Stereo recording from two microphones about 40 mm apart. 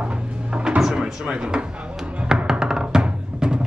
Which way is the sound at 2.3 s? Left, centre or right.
Centre.